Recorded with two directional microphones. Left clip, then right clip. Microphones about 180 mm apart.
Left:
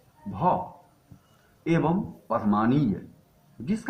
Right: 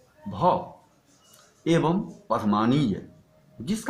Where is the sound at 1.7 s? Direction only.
35° right (ahead or behind).